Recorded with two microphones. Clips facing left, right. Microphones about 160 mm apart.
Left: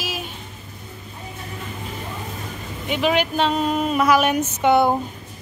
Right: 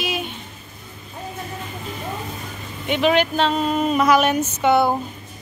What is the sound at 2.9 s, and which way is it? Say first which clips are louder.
Speech: right 2 dB; 5° left (ahead or behind).